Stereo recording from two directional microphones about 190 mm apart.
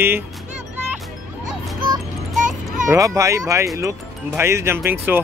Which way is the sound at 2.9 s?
15° right (ahead or behind).